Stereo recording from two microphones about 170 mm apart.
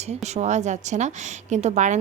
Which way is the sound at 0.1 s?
40° right (ahead or behind).